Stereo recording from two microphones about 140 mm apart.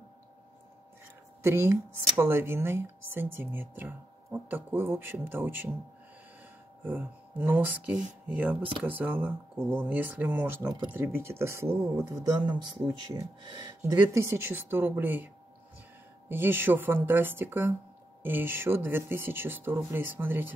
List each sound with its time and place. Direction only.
1.4 s speech: 20° right (ahead or behind)
6.8 s speech: 10° right (ahead or behind)
16.3 s speech: 15° right (ahead or behind)